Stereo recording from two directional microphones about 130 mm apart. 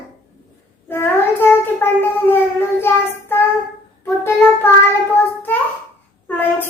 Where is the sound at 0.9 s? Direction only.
15° left (ahead or behind).